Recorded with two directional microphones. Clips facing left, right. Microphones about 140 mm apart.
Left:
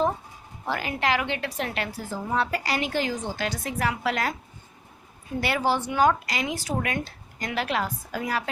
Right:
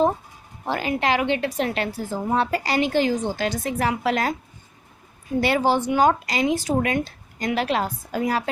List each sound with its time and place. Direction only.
0.6 s a woman's voice: 25° right (ahead or behind)
5.4 s a woman's voice: 25° right (ahead or behind)